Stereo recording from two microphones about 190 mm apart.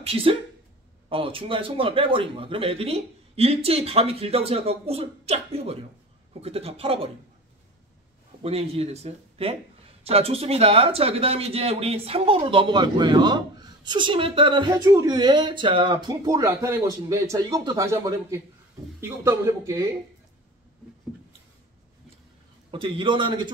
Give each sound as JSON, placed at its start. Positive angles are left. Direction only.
{"t": 0.0, "sound": "a man's voice", "side_deg": -30}
{"t": 8.4, "sound": "a man's voice", "side_deg": -30}
{"t": 22.7, "sound": "speech", "side_deg": -25}